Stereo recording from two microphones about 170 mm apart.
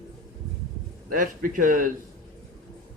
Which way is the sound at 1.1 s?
55° right (ahead or behind).